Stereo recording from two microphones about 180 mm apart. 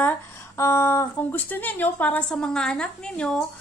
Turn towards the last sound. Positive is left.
turn(degrees=5)  # may be behind; listen again after turning